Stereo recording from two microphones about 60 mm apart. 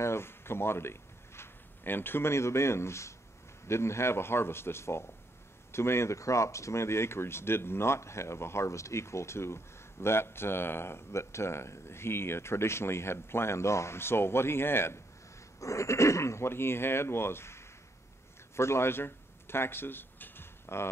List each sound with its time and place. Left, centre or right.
0.0 s speech: left
15.6 s speech: left